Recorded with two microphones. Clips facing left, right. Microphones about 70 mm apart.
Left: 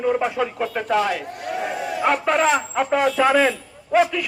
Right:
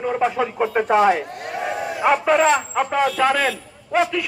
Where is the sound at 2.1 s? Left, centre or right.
Centre.